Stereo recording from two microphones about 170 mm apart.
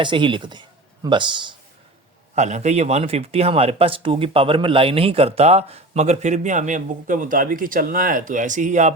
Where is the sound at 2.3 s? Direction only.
40° right (ahead or behind).